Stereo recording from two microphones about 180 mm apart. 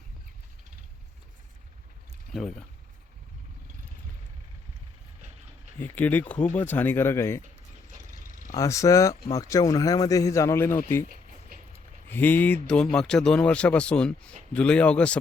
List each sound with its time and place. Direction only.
2.3 s a man's voice: centre (ahead or behind)
5.8 s speech: 10° left (ahead or behind)
8.5 s speech: 15° left (ahead or behind)
11.1 s a sound: 50° right (ahead or behind)
12.0 s a man's voice: 10° left (ahead or behind)